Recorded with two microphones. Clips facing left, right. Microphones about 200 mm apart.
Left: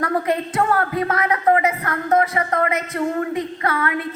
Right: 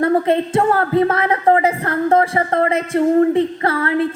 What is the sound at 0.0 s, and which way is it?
Speech, 25° right (ahead or behind).